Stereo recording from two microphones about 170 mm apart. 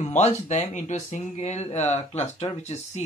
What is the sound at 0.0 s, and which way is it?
Speech, 40° left (ahead or behind).